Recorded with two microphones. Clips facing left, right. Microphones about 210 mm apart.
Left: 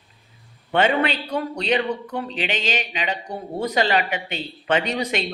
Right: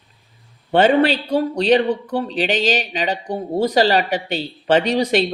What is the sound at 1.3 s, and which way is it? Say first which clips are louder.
Speech: right 8 dB; 35° right (ahead or behind).